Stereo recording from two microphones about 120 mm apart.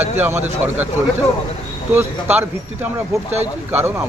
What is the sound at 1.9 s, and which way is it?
Speech, 15° right (ahead or behind).